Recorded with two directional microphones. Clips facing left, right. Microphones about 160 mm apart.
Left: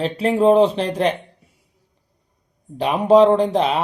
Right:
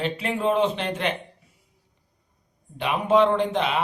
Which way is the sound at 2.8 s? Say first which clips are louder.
Left 7 dB; 35° left (ahead or behind).